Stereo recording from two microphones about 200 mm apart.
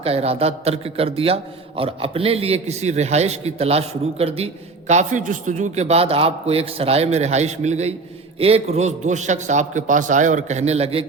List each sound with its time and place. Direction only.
0.0 s a man's voice: 30° right (ahead or behind)